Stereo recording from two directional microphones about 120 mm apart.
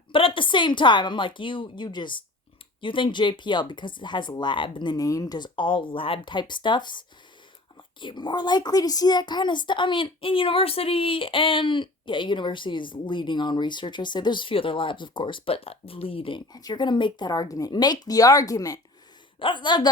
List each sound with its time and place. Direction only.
0.1 s a woman's voice: 45° left (ahead or behind)
8.0 s a woman's voice: 35° left (ahead or behind)
16.5 s speech: 35° left (ahead or behind)
19.4 s speech: 40° left (ahead or behind)